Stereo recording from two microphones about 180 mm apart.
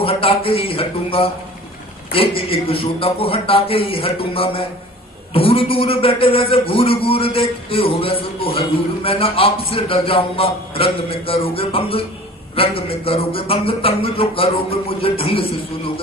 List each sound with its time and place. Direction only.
0.0 s a man's voice: 30° left (ahead or behind)